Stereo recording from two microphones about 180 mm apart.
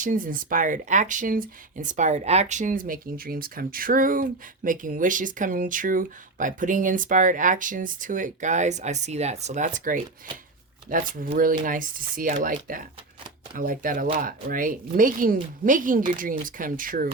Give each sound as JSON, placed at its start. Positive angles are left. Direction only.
{"t": 0.0, "sound": "speech", "side_deg": -50}